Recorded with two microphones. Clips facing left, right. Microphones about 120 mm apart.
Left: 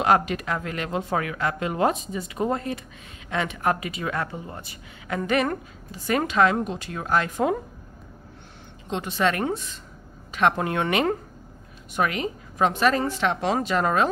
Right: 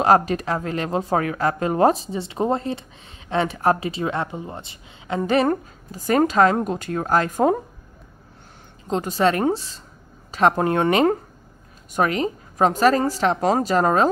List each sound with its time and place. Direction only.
0.0 s a woman's voice: 35° right (ahead or behind)
8.8 s a woman's voice: 40° right (ahead or behind)